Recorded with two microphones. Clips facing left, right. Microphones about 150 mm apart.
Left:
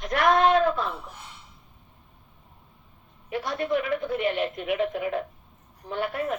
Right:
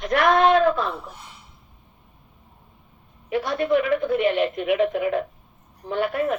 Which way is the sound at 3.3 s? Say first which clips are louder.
Right 5 dB; 80° right.